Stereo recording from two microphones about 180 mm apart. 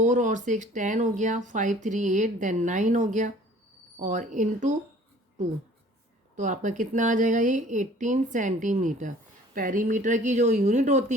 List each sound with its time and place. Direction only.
0.0 s speech: 45° right (ahead or behind)
6.3 s speech: 45° right (ahead or behind)